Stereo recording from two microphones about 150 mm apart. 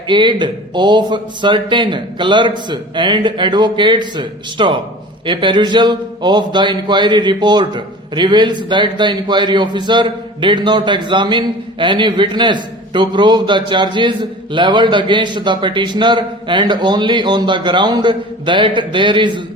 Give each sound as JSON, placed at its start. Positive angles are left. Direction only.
{"t": 0.1, "sound": "a man's voice", "side_deg": -30}